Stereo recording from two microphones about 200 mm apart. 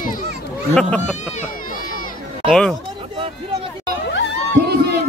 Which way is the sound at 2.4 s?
5° left (ahead or behind).